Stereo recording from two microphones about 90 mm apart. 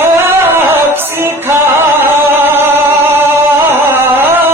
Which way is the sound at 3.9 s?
25° right (ahead or behind).